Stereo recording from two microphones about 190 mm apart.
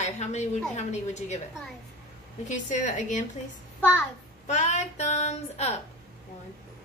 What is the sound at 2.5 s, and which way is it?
Speech, 40° left (ahead or behind).